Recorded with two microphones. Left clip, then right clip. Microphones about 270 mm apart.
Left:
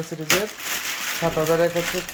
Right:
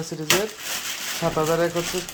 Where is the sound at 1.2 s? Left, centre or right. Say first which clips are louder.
Even; centre.